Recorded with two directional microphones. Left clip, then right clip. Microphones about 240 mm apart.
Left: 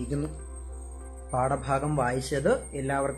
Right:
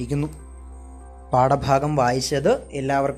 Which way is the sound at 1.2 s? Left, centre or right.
Right.